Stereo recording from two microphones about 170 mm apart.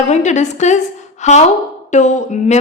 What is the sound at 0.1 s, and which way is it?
A woman's voice, 45° left (ahead or behind).